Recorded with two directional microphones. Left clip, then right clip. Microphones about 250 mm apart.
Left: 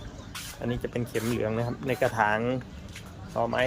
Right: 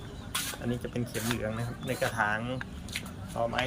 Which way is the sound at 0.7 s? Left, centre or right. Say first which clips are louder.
Left 4 dB; centre.